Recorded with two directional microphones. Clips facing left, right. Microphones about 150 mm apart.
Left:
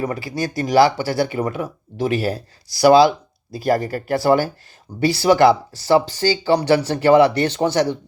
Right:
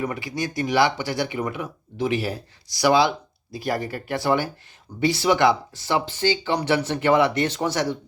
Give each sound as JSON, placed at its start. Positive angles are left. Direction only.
{"t": 0.0, "sound": "speech", "side_deg": 35}